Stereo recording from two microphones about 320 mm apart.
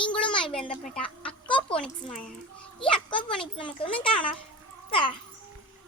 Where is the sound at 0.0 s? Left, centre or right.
Centre.